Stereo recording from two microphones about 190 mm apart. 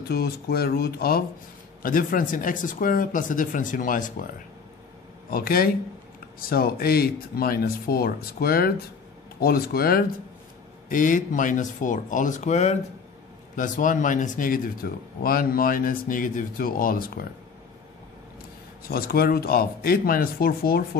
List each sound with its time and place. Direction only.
0.1 s speech: 55° left (ahead or behind)
5.3 s speech: 50° left (ahead or behind)
18.9 s speech: 50° left (ahead or behind)